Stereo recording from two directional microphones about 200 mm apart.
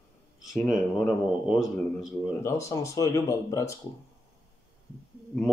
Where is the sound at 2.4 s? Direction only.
15° left (ahead or behind).